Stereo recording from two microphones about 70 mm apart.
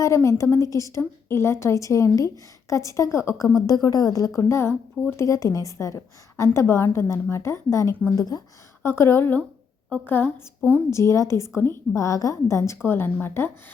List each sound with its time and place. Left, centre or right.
0.0 s a woman's voice: left
3.8 s a woman's voice: left
4.4 s a woman's voice: left
5.1 s a woman's voice: left
8.1 s a woman's voice: left
8.8 s a woman's voice: left
10.9 s a woman's voice: left
12.0 s a woman's voice: left